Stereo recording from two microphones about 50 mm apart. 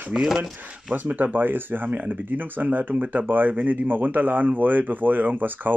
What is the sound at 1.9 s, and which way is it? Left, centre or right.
Speech, right.